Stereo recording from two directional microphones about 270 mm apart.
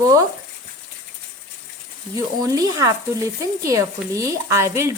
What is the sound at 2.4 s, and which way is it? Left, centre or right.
Speech, centre.